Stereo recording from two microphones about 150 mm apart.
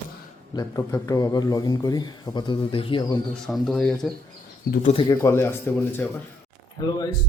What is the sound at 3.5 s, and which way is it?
Speech, 5° left (ahead or behind).